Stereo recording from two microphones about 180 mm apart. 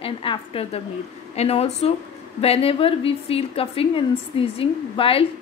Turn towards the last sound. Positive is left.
turn(degrees=30)  # may be behind; listen again after turning